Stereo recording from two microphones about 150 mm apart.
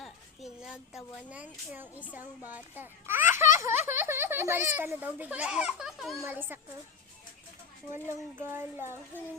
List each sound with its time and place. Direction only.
0.0 s a woman's voice: centre (ahead or behind)
6.2 s speech: 15° right (ahead or behind)
7.9 s speech: 15° right (ahead or behind)